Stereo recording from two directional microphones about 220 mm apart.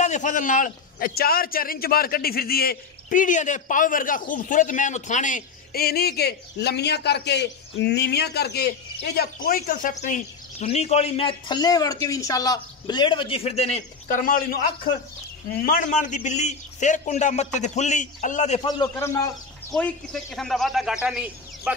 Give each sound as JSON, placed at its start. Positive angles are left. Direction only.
{"t": 0.0, "sound": "a man's voice", "side_deg": 35}
{"t": 18.6, "sound": "a man's voice", "side_deg": 20}
{"t": 19.7, "sound": "a man's voice", "side_deg": 0}